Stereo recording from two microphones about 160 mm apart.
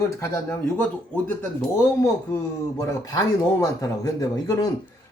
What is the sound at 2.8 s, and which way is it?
Speech, 20° left (ahead or behind).